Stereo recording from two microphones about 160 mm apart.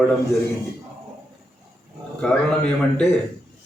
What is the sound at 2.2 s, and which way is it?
Speech, 5° left (ahead or behind).